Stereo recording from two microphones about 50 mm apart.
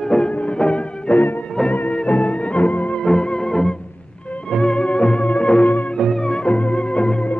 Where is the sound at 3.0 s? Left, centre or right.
Centre.